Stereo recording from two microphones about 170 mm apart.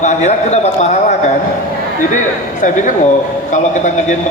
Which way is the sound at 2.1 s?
50° left (ahead or behind).